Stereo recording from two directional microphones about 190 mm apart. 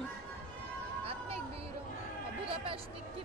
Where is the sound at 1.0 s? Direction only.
30° right (ahead or behind).